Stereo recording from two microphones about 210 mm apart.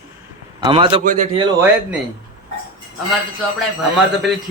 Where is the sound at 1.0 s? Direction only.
35° right (ahead or behind).